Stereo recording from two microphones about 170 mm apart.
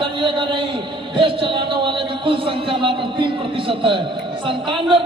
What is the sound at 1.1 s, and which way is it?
A man's voice, 30° right (ahead or behind).